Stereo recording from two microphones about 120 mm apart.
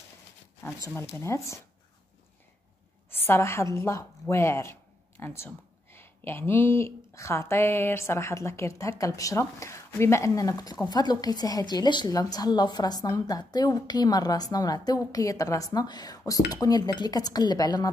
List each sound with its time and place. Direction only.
0.7 s speech: 25° left (ahead or behind)
3.1 s a woman's voice: 20° left (ahead or behind)